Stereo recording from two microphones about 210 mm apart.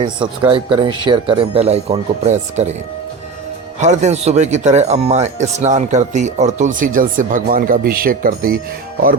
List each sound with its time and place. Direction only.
0.0 s speech: 25° right (ahead or behind)
3.8 s speech: 35° right (ahead or behind)